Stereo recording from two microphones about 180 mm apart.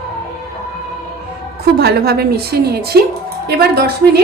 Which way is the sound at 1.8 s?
60° right (ahead or behind).